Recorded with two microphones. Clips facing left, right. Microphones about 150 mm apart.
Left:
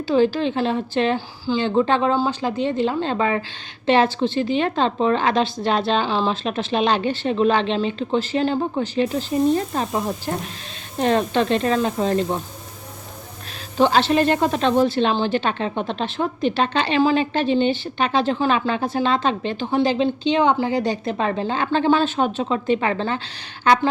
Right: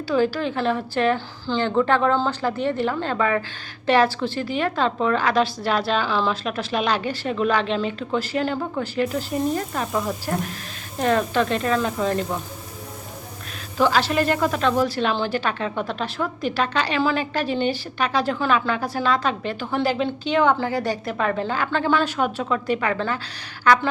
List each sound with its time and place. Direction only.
0.1 s a woman's voice: 25° left (ahead or behind)
13.7 s a woman's voice: 25° left (ahead or behind)